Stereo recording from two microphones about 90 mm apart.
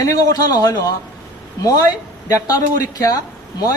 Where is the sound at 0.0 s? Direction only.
40° left (ahead or behind).